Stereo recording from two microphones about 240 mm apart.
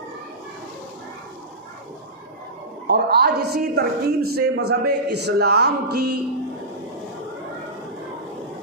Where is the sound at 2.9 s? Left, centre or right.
Right.